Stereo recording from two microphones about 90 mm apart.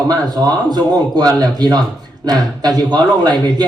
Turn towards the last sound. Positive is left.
turn(degrees=-50)  # may be behind; listen again after turning